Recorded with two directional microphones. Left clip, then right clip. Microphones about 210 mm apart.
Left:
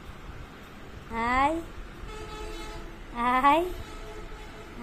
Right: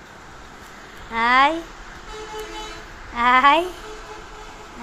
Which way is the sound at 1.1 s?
5° right (ahead or behind).